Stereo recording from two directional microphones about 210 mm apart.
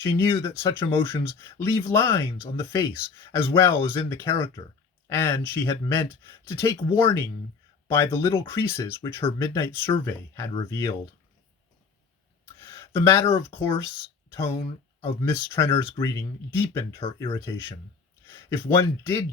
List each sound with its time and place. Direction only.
0.0 s speech: 10° left (ahead or behind)
12.5 s speech: 10° left (ahead or behind)
15.2 s speech: 10° left (ahead or behind)